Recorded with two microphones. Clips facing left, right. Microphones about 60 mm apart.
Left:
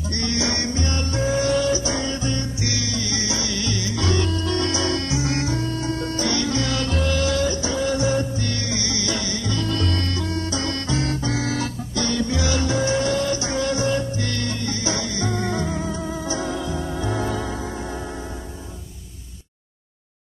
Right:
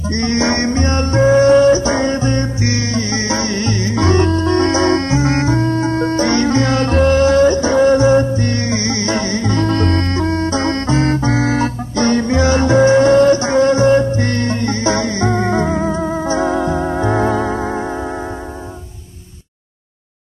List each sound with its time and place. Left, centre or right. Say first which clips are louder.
0.1 s music: right 9 dB; right